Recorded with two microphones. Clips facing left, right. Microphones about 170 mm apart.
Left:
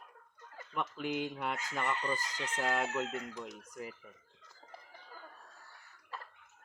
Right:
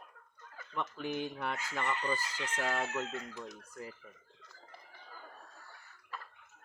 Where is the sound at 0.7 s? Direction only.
15° left (ahead or behind).